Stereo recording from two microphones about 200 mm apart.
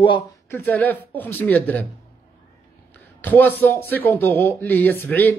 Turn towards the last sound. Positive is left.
turn(degrees=10)  # may be behind; listen again after turning